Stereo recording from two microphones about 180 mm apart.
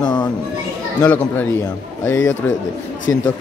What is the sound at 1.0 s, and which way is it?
Speech, 10° left (ahead or behind).